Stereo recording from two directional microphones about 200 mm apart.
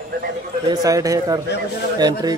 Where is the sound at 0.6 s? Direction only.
15° right (ahead or behind).